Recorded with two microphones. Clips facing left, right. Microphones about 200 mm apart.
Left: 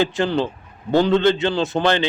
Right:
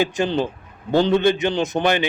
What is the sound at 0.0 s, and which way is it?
A man's voice, 15° right (ahead or behind).